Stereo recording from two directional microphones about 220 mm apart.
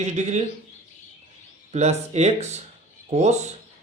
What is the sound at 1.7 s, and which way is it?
Speech, 30° right (ahead or behind).